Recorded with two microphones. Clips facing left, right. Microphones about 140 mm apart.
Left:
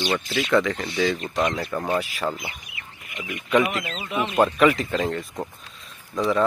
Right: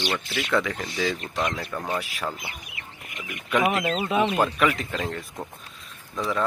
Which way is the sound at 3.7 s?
60° right (ahead or behind).